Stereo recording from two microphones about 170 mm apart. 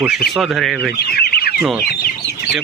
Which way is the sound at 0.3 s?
5° right (ahead or behind).